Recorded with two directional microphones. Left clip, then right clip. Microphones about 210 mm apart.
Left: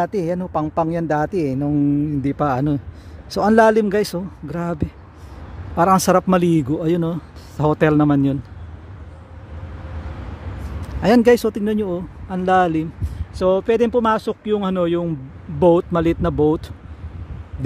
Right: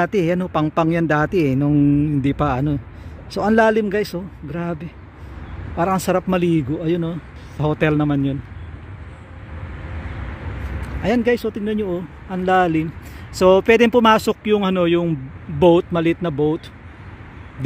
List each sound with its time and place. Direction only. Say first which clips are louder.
0.0 s speech: right 2 dB; centre (ahead or behind); by 8.4 s 20° left (ahead or behind)
11.0 s speech: left 5 dB; 20° left (ahead or behind)
13.4 s speech: right 4 dB; 5° right (ahead or behind); by 16.6 s 20° left (ahead or behind)